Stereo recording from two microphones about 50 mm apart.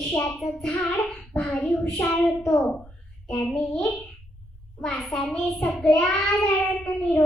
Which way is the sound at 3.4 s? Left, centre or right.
Centre.